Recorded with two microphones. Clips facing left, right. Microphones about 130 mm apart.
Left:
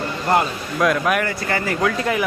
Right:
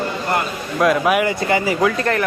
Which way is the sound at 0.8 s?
5° right (ahead or behind).